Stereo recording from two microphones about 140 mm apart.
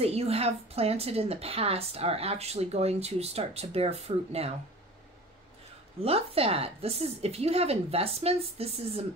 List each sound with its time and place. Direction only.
0.0 s a woman's voice: 45° right (ahead or behind)
6.0 s a woman's voice: 45° right (ahead or behind)